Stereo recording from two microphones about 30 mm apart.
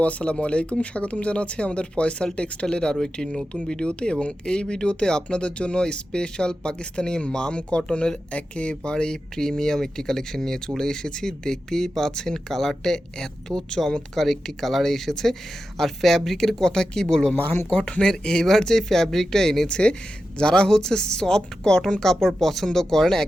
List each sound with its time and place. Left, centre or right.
0.0 s speech: left
2.9 s speech: left
3.8 s speech: left
8.8 s speech: left
19.6 s speech: left
22.0 s speech: centre